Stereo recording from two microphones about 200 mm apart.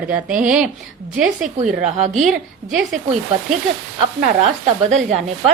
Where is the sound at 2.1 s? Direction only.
5° right (ahead or behind).